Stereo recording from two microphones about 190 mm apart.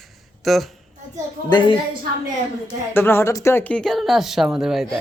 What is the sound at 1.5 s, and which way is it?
Speech, 25° left (ahead or behind).